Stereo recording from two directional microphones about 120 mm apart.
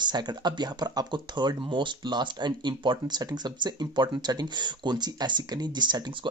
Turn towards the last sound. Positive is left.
turn(degrees=-40)  # may be behind; listen again after turning